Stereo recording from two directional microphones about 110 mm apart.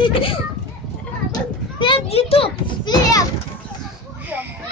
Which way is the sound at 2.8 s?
35° left (ahead or behind).